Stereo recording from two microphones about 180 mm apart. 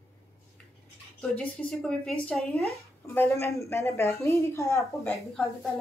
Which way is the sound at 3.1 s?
15° left (ahead or behind).